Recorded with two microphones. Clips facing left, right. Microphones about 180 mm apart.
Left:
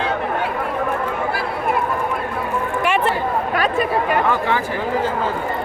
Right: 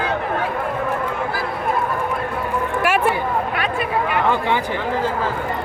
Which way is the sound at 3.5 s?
40° left (ahead or behind).